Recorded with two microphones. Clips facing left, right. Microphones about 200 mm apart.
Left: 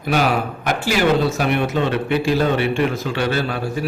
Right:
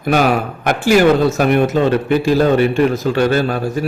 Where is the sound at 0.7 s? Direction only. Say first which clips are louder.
Right 7 dB; 50° right (ahead or behind).